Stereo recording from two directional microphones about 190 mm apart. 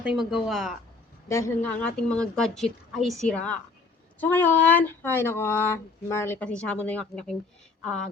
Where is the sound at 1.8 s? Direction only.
5° left (ahead or behind).